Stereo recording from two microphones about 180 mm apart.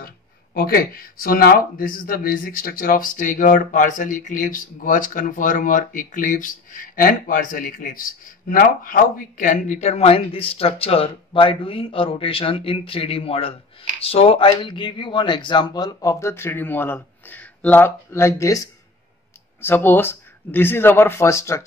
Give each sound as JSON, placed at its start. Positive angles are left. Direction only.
{"t": 0.6, "sound": "speech", "side_deg": 55}